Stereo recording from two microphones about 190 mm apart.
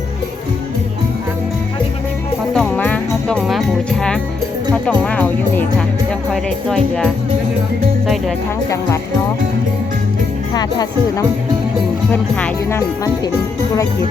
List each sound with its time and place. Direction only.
2.5 s music: 5° left (ahead or behind)
4.7 s speech: 5° left (ahead or behind)
10.5 s speech: 20° left (ahead or behind)
12.1 s speech: 10° left (ahead or behind)